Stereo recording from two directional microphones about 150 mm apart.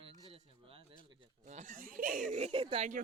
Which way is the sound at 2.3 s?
40° right (ahead or behind).